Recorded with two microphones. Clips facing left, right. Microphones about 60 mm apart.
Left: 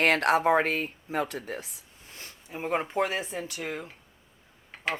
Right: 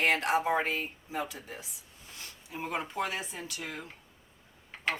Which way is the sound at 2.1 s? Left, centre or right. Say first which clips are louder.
Left 2 dB; left.